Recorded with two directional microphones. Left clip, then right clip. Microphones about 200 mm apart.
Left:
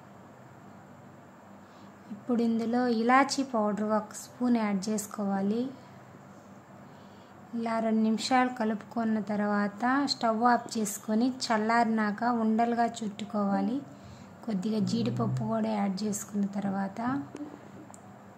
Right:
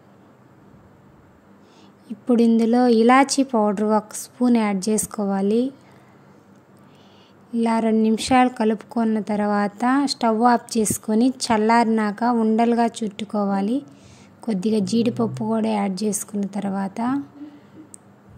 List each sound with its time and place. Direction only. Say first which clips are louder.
2.2 s a woman's voice: right 12 dB; 35° right (ahead or behind)
7.5 s a woman's voice: right 9 dB; 35° right (ahead or behind)